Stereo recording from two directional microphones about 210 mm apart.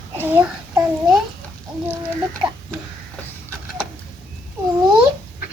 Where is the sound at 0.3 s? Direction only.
5° right (ahead or behind).